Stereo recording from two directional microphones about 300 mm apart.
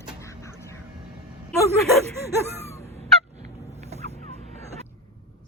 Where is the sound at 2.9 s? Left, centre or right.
Right.